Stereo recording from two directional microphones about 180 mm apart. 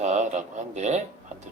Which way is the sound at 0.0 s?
40° right (ahead or behind).